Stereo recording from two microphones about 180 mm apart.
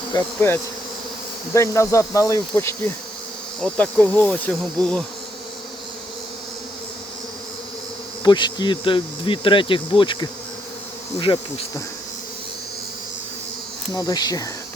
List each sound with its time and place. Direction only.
0.3 s insect: 10° left (ahead or behind)
8.2 s speech: 25° left (ahead or behind)
13.9 s speech: 20° left (ahead or behind)